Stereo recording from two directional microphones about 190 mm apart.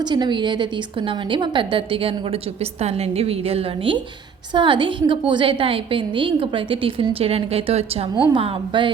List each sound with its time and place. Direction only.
0.0 s a woman's voice: 25° right (ahead or behind)